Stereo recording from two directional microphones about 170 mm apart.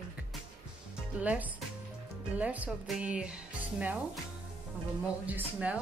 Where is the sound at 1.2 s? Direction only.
10° right (ahead or behind).